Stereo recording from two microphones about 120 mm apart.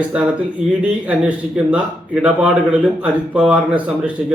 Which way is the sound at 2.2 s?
10° right (ahead or behind).